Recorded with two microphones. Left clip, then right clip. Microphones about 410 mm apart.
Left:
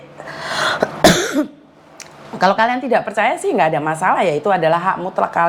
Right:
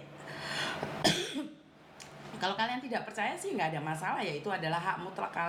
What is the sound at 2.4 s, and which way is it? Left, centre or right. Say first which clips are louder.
A woman's voice: left 19 dB; left.